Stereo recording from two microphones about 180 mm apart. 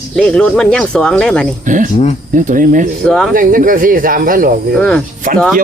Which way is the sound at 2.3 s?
45° right (ahead or behind).